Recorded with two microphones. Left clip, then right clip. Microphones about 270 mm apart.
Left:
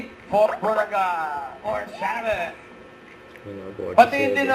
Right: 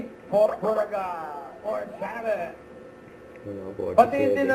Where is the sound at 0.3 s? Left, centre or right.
Centre.